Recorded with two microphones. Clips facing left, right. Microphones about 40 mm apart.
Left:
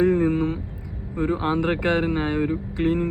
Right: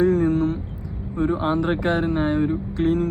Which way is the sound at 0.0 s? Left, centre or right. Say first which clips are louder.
Right 1 dB; left.